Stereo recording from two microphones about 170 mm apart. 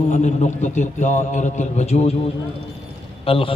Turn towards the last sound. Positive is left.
turn(degrees=35)  # may be behind; listen again after turning